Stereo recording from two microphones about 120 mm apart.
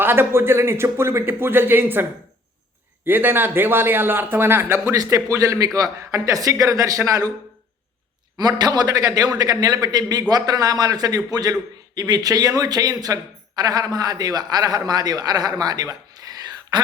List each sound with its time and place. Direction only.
0.0 s a man's voice: 20° right (ahead or behind)
8.4 s a man's voice: 35° right (ahead or behind)